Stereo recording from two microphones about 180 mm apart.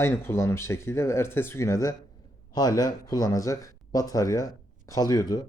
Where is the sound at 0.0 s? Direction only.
15° left (ahead or behind).